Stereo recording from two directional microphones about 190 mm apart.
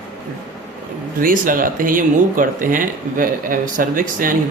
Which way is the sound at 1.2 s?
45° right (ahead or behind).